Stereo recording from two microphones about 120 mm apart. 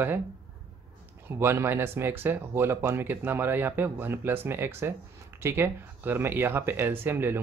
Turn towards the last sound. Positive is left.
turn(degrees=-20)  # may be behind; listen again after turning